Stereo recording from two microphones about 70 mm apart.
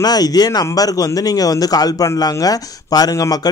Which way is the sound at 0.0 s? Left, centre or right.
Left.